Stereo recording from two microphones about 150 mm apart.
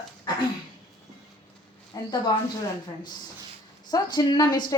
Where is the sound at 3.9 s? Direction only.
25° left (ahead or behind).